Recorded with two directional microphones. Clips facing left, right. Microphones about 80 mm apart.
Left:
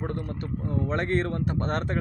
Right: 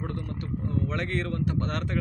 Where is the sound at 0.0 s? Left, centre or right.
Left.